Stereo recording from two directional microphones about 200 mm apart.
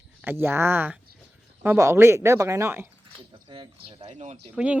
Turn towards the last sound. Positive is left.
turn(degrees=-5)  # may be behind; listen again after turning